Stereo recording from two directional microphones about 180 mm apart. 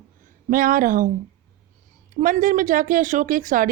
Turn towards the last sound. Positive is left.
turn(degrees=-50)  # may be behind; listen again after turning